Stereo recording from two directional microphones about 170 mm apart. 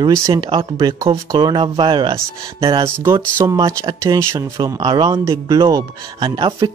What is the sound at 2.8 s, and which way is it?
Speech, 15° right (ahead or behind).